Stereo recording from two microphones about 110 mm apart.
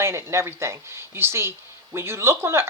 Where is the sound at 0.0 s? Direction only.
25° right (ahead or behind).